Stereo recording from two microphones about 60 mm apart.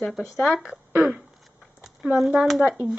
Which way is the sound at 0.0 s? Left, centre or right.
Centre.